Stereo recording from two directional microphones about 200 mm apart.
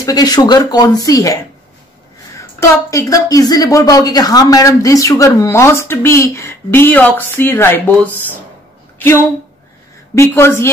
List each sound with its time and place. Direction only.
0.0 s speech: 20° left (ahead or behind)
2.6 s a woman's voice: 15° left (ahead or behind)
10.1 s a woman's voice: 15° left (ahead or behind)